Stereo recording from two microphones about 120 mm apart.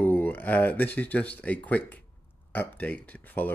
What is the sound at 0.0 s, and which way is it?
Speech, 15° left (ahead or behind).